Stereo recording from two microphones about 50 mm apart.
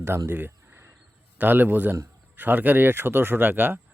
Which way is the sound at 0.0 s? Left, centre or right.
Right.